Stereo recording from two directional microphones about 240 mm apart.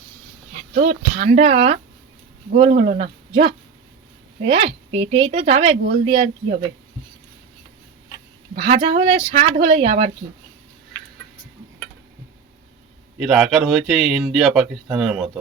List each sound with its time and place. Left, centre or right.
0.7 s speech: right
8.6 s speech: right
13.1 s speech: centre